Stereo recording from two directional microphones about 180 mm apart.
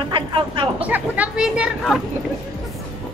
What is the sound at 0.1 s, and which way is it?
Speech, 25° right (ahead or behind).